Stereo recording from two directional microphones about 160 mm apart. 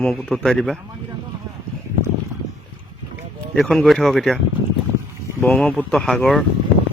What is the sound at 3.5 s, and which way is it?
Speech, 5° left (ahead or behind).